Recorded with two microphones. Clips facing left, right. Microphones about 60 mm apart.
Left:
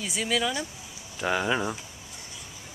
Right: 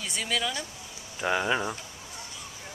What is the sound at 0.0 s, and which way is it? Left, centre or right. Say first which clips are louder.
Speech: left 3 dB; centre.